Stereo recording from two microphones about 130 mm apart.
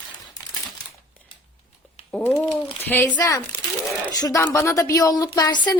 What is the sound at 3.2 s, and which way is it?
A woman's voice, 30° left (ahead or behind).